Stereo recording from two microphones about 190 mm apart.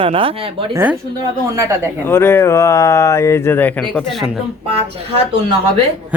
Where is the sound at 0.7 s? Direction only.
10° right (ahead or behind).